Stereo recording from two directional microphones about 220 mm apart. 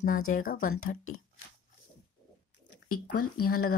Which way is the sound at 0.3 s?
40° left (ahead or behind).